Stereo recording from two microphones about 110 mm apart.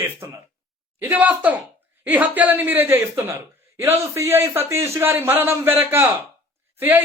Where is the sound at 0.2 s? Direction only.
25° right (ahead or behind).